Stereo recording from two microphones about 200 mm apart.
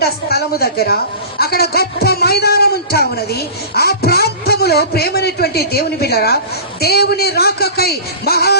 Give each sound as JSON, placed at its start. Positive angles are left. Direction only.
{"t": 0.0, "sound": "a man's voice", "side_deg": 50}